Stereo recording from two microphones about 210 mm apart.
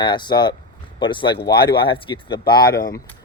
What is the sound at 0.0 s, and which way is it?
Speech, 20° left (ahead or behind).